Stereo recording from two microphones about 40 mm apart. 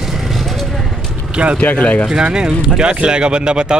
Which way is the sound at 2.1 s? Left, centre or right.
Right.